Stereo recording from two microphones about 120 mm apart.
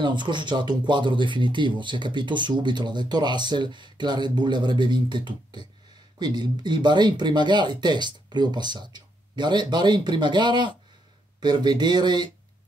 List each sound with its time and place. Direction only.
0.0 s speech: 40° right (ahead or behind)